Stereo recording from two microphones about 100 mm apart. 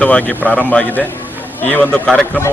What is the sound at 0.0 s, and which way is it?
Speech, 15° left (ahead or behind).